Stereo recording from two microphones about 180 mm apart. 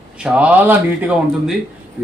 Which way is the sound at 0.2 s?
5° right (ahead or behind).